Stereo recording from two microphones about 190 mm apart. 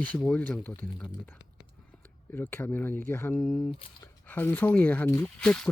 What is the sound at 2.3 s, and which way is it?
Speech, 10° left (ahead or behind).